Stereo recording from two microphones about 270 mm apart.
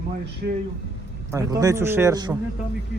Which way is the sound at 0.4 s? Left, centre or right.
Right.